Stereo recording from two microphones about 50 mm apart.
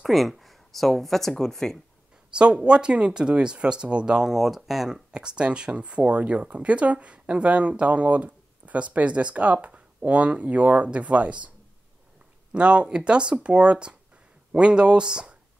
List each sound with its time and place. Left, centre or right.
0.0 s speech: centre
2.3 s speech: right
4.3 s speech: centre
5.1 s speech: centre
12.5 s speech: right